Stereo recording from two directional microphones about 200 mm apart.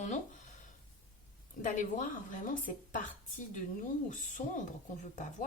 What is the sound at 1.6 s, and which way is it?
Speech, 40° left (ahead or behind).